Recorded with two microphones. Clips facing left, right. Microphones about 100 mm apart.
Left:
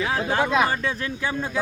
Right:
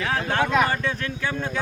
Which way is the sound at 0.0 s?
5° left (ahead or behind).